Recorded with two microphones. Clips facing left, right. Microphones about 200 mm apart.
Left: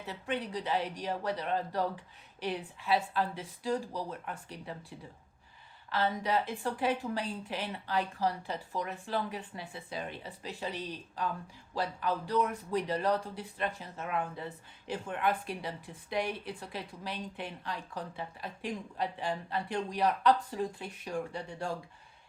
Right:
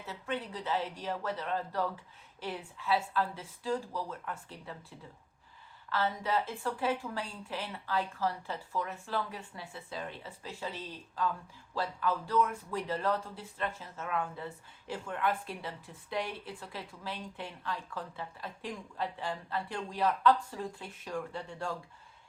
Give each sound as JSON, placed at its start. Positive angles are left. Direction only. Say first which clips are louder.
{"t": 0.0, "sound": "speech", "louder": "left 2 dB", "side_deg": 15}